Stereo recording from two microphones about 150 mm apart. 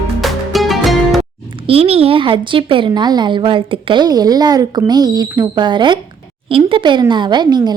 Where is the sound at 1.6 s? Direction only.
40° right (ahead or behind).